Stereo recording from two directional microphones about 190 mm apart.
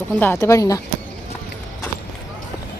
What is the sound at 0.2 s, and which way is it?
Speech, 15° left (ahead or behind).